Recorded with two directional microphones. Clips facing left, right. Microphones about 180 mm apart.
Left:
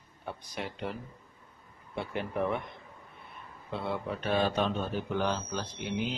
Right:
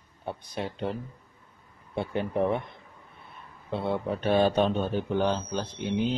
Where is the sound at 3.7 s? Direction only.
25° right (ahead or behind).